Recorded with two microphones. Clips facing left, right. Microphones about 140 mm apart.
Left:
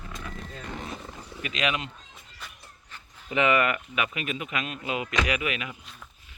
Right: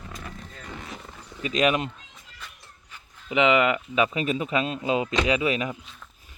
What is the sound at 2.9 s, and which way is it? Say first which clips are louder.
Speech: right 3 dB; 15° right (ahead or behind).